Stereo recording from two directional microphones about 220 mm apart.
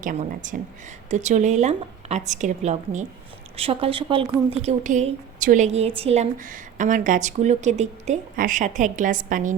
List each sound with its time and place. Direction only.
0.0 s a woman's voice: 35° right (ahead or behind)